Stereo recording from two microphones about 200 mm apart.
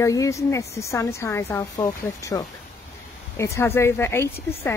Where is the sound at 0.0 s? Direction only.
15° left (ahead or behind).